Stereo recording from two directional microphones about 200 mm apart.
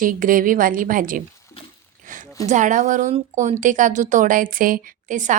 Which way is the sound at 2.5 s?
40° right (ahead or behind).